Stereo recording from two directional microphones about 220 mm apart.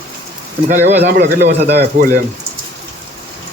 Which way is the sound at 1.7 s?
50° right (ahead or behind).